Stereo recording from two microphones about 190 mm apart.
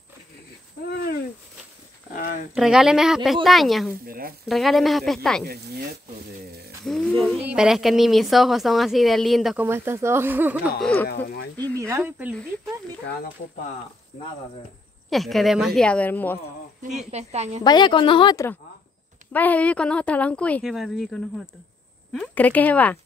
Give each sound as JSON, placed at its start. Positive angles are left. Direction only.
{"t": 2.1, "sound": "a sound", "side_deg": 50}
{"t": 2.5, "sound": "a woman's voice", "side_deg": 0}
{"t": 4.0, "sound": "a sound", "side_deg": -50}
{"t": 4.5, "sound": "a woman's voice", "side_deg": 0}
{"t": 5.4, "sound": "speech", "side_deg": -55}
{"t": 6.8, "sound": "a sound", "side_deg": 0}
{"t": 7.4, "sound": "a woman's voice", "side_deg": -5}
{"t": 9.7, "sound": "speech", "side_deg": -15}
{"t": 11.1, "sound": "speech", "side_deg": 55}
{"t": 11.7, "sound": "speech", "side_deg": -15}
{"t": 15.0, "sound": "a woman's voice", "side_deg": 0}
{"t": 17.1, "sound": "a woman's voice", "side_deg": -35}
{"t": 17.6, "sound": "a woman's voice", "side_deg": 25}